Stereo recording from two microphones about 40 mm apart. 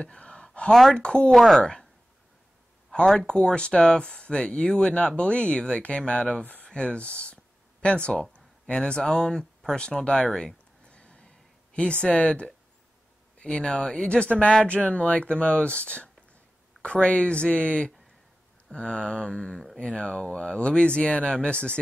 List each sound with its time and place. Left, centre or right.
0.0 s a sound: left
0.9 s speech: left
1.3 s speech: centre
1.6 s speech: left
3.2 s speech: left
10.9 s a sound: left
11.7 s speech: left
13.4 s speech: left
19.5 s speech: centre
19.8 s speech: left